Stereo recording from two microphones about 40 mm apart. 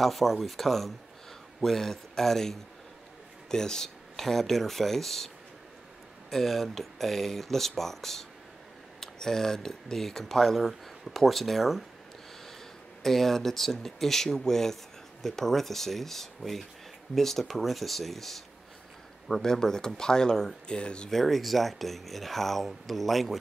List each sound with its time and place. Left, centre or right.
0.0 s speech: centre
6.3 s speech: centre
13.0 s speech: centre; by 21.1 s left
21.1 s speech: centre